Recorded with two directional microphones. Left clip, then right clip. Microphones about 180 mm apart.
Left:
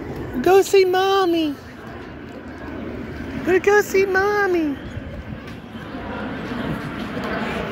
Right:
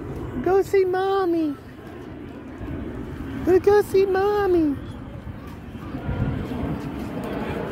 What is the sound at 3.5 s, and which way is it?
Speech, 35° right (ahead or behind).